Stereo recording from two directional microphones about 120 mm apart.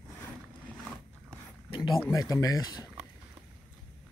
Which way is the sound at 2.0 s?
25° left (ahead or behind).